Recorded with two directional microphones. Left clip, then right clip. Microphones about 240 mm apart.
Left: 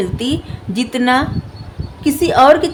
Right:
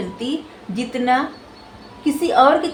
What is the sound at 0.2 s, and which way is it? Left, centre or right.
A woman's voice, left.